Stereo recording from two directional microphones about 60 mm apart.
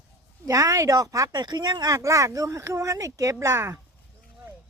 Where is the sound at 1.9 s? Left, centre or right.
Right.